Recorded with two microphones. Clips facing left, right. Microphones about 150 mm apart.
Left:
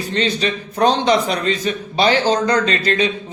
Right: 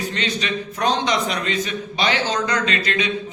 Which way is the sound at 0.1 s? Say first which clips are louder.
Left 5 dB; 35° left (ahead or behind).